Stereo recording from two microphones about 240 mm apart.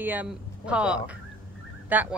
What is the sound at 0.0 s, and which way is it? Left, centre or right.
Speech, centre.